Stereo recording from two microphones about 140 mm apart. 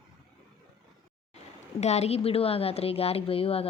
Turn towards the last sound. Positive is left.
turn(degrees=45)  # may be behind; listen again after turning